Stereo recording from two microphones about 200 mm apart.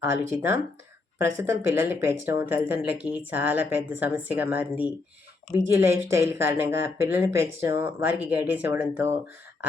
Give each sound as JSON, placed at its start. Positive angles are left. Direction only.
{"t": 0.0, "sound": "speech", "side_deg": -10}
{"t": 2.6, "sound": "speech", "side_deg": 55}
{"t": 3.0, "sound": "speech", "side_deg": -10}